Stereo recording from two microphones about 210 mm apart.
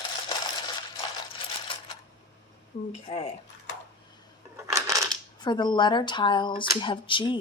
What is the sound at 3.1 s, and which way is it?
Speech, 30° left (ahead or behind).